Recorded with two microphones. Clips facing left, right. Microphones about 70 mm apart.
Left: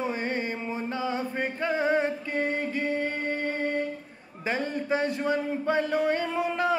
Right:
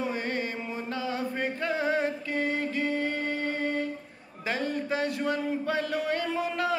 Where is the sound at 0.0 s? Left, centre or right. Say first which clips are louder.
Left 1 dB; centre.